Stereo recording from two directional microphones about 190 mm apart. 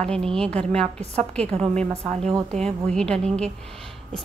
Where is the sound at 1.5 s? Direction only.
35° right (ahead or behind).